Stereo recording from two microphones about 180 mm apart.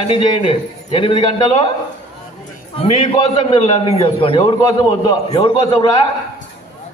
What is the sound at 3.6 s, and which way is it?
A man's voice, 35° left (ahead or behind).